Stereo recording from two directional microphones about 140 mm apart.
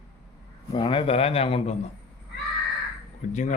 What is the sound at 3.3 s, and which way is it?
Speech, 60° left (ahead or behind).